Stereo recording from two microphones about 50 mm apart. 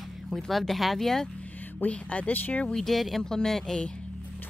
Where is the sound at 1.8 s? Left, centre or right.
Left.